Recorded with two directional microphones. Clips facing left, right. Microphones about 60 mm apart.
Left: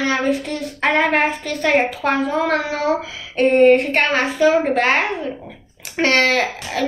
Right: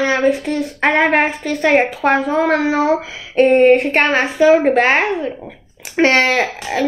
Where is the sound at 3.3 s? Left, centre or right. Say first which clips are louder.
Right 2 dB; right.